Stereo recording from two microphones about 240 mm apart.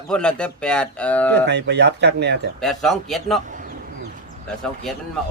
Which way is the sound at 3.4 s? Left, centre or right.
Right.